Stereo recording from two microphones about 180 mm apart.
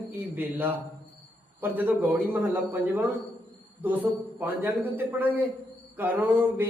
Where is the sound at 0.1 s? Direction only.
10° right (ahead or behind).